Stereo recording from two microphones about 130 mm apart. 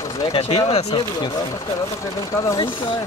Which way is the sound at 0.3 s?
45° left (ahead or behind).